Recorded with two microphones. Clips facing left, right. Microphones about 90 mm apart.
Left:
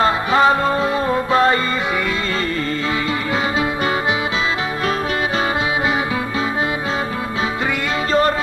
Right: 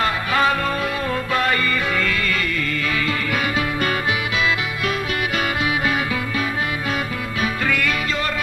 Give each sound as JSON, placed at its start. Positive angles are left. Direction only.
{"t": 0.0, "sound": "music", "side_deg": 25}